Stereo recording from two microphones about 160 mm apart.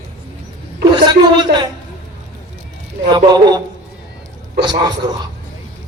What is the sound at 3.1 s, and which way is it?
Speech, 25° right (ahead or behind).